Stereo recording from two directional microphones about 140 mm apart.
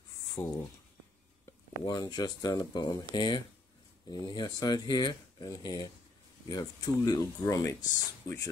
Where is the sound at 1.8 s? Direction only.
30° left (ahead or behind).